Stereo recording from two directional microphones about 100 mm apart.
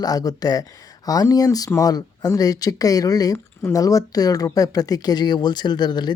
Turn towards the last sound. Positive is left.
turn(degrees=45)  # may be behind; listen again after turning